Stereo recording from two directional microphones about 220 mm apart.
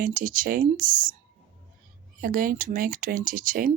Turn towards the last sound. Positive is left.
turn(degrees=-40)  # may be behind; listen again after turning